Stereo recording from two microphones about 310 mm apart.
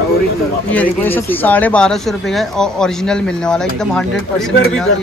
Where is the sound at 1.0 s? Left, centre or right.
Centre.